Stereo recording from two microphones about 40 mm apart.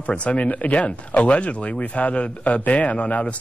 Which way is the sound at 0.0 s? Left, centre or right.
Left.